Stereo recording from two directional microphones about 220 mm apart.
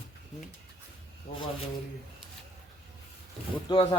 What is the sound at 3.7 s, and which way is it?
Speech, 20° left (ahead or behind).